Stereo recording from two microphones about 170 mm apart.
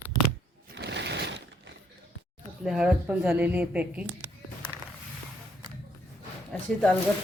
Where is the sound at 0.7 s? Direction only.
90° right.